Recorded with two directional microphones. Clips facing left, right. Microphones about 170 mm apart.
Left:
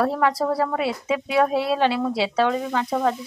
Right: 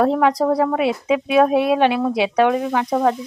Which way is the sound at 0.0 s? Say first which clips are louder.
Right 5 dB; 20° right (ahead or behind).